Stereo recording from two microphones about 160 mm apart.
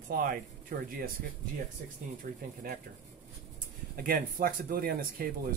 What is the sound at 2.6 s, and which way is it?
Speech, 65° right (ahead or behind).